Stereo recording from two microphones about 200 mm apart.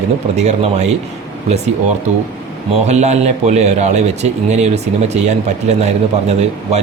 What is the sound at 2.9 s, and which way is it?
A man's voice, 35° right (ahead or behind).